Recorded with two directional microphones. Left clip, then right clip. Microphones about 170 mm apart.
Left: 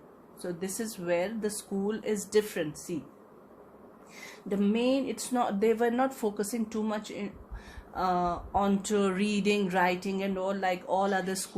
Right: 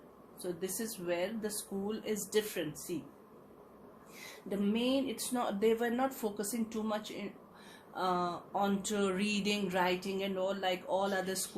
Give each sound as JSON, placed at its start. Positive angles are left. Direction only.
{"t": 0.6, "sound": "speech", "side_deg": 55}
{"t": 4.2, "sound": "speech", "side_deg": 55}